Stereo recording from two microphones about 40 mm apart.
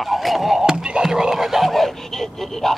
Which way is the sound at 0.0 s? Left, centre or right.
Centre.